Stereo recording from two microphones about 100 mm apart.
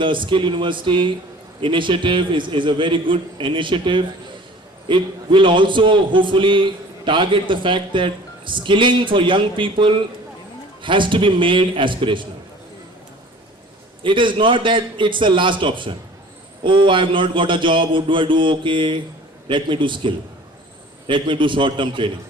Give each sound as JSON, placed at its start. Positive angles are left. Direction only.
{"t": 0.0, "sound": "a man's voice", "side_deg": -55}
{"t": 14.0, "sound": "a man's voice", "side_deg": -55}